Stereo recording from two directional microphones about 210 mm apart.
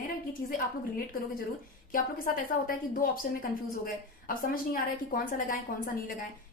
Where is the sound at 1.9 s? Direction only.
40° left (ahead or behind).